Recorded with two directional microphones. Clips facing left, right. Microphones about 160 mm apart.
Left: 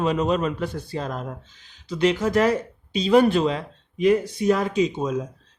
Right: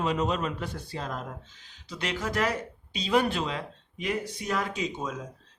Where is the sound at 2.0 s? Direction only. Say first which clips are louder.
Left 10 dB; 25° left (ahead or behind).